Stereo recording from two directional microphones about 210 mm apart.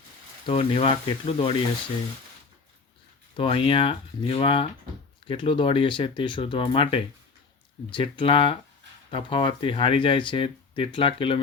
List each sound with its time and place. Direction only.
0.4 s speech: 25° left (ahead or behind)
3.3 s speech: 25° left (ahead or behind)